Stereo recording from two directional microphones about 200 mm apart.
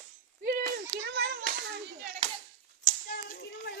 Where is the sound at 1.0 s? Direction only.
55° right (ahead or behind).